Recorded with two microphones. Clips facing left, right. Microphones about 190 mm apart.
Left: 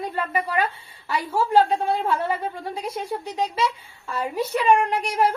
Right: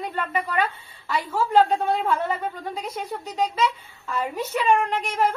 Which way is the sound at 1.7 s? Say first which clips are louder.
Even; 10° left (ahead or behind).